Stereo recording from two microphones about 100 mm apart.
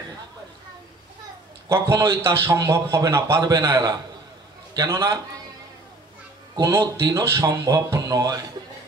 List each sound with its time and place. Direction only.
1.7 s a man's voice: 30° right (ahead or behind)
6.8 s a man's voice: 40° right (ahead or behind)